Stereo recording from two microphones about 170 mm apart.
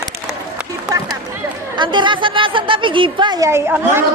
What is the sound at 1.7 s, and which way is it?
A woman's voice, 25° right (ahead or behind).